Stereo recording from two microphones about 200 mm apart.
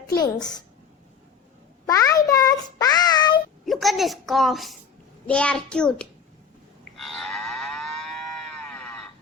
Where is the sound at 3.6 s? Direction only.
Centre (ahead or behind).